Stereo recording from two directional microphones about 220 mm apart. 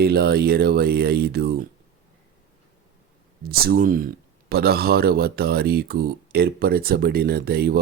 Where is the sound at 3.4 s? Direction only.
45° right (ahead or behind).